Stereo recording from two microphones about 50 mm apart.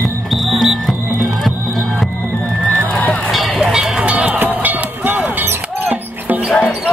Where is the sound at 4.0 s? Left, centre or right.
Right.